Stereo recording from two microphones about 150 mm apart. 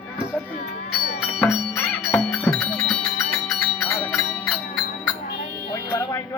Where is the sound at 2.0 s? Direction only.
Centre (ahead or behind).